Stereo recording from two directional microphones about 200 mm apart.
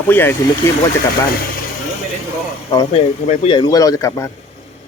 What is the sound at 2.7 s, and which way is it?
Speech, 20° left (ahead or behind).